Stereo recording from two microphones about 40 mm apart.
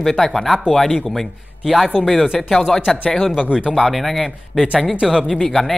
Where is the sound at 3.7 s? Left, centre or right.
Centre.